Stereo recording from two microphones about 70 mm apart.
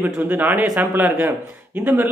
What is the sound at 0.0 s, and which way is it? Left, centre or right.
A man's voice, right.